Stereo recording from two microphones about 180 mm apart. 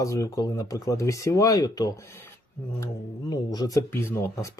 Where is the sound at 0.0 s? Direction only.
20° left (ahead or behind).